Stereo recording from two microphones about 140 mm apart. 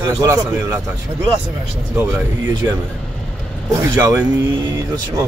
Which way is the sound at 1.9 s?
15° right (ahead or behind).